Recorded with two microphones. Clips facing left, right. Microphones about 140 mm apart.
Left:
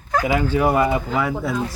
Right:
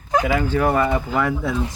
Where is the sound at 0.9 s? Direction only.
Centre (ahead or behind).